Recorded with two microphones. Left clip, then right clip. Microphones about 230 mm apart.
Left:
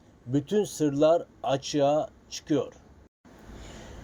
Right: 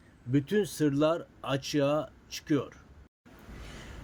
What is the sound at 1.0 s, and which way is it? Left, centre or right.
Speech, right.